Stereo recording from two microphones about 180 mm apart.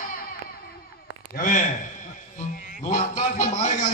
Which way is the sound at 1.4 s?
50° left (ahead or behind).